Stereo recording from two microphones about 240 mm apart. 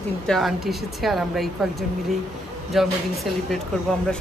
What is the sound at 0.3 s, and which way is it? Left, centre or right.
A woman's voice, centre.